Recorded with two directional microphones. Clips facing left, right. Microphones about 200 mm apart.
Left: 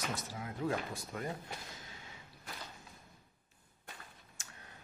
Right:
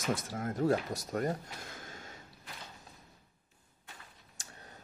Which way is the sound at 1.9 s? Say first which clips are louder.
Right 5 dB; 45° right (ahead or behind).